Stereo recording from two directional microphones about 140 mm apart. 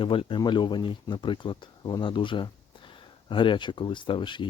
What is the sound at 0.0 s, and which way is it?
Speech, 40° left (ahead or behind).